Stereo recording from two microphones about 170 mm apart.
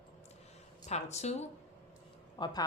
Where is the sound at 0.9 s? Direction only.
40° left (ahead or behind).